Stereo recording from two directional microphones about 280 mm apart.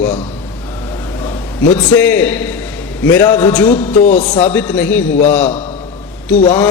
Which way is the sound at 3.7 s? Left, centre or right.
Left.